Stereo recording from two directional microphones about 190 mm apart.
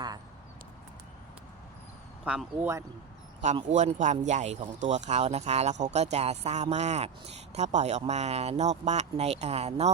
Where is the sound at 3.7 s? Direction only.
40° right (ahead or behind).